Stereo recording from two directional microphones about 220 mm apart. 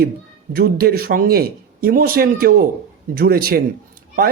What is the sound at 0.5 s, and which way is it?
A man's voice, 45° right (ahead or behind).